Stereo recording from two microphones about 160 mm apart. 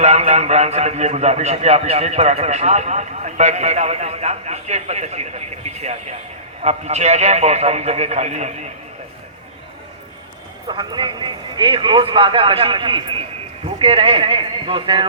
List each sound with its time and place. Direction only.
0.0 s a man's voice: 45° right (ahead or behind)
10.8 s a man's voice: 30° right (ahead or behind)